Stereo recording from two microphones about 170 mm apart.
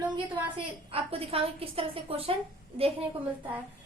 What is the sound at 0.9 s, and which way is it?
A woman's voice, 35° right (ahead or behind).